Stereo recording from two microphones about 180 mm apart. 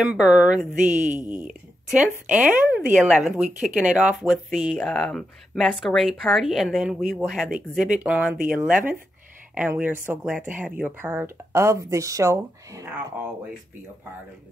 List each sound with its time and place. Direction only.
0.0 s speech: 5° right (ahead or behind)
0.7 s a woman's voice: 45° right (ahead or behind)
2.2 s speech: 10° right (ahead or behind)